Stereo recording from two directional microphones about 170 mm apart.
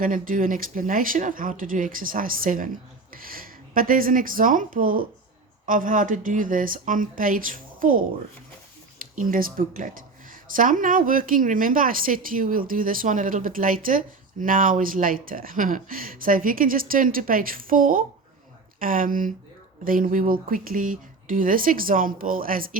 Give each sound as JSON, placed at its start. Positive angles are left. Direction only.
{"t": 0.0, "sound": "a woman's voice", "side_deg": -55}
{"t": 9.1, "sound": "a woman's voice", "side_deg": -55}